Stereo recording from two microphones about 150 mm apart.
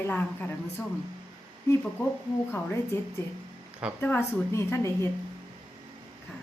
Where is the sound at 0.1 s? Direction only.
10° left (ahead or behind).